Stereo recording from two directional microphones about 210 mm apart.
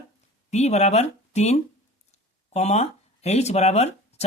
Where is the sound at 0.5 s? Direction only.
30° left (ahead or behind).